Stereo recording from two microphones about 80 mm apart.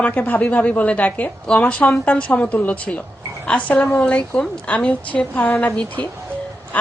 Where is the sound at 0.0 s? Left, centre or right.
Centre.